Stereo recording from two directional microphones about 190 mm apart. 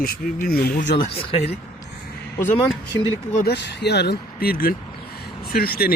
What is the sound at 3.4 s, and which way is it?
Speech, 60° left (ahead or behind).